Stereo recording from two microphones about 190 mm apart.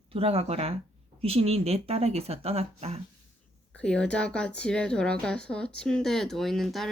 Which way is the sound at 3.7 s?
5° left (ahead or behind).